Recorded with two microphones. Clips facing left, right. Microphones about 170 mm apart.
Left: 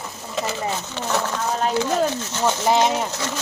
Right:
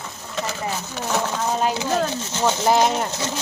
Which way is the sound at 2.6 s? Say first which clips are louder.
Even; centre (ahead or behind).